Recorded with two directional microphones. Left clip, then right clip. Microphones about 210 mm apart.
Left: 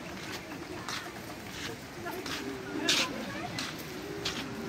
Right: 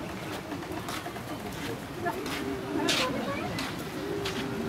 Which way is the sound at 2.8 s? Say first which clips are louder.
Right 1 dB; 15° left (ahead or behind).